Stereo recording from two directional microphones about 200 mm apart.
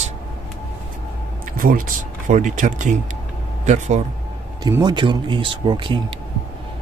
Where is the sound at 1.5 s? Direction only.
45° right (ahead or behind).